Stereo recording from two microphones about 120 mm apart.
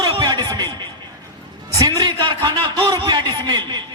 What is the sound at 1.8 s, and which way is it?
A man's voice, 35° right (ahead or behind).